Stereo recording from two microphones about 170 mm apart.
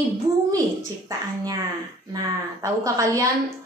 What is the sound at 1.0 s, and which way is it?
Speech, 20° right (ahead or behind).